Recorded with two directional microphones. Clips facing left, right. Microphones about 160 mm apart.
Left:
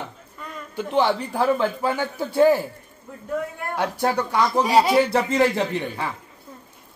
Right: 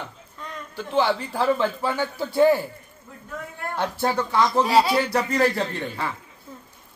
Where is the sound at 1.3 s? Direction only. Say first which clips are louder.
Left 1 dB; 10° left (ahead or behind).